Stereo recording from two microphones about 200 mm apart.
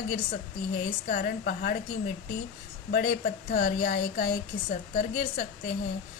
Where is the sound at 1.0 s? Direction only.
50° left (ahead or behind).